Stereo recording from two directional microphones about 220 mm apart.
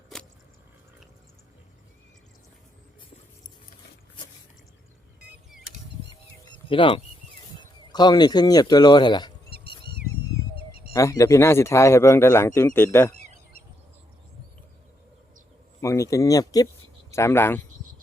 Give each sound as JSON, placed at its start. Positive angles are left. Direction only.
{"t": 0.1, "sound": "a sound", "side_deg": 5}
{"t": 6.4, "sound": "a sound", "side_deg": 25}
{"t": 7.9, "sound": "speech", "side_deg": 20}
{"t": 9.5, "sound": "dog", "side_deg": -45}
{"t": 10.9, "sound": "speech", "side_deg": 15}
{"t": 15.8, "sound": "speech", "side_deg": 15}